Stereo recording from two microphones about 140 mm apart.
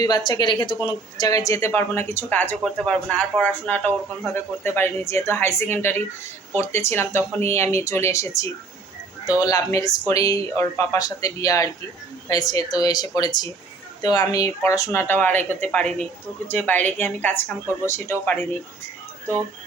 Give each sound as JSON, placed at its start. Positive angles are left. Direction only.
{"t": 0.3, "sound": "a woman's voice", "side_deg": 35}